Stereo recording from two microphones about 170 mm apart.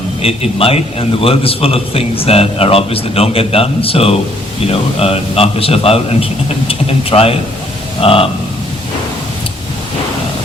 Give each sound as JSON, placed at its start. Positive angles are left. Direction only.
{"t": 0.2, "sound": "a man's voice", "side_deg": 35}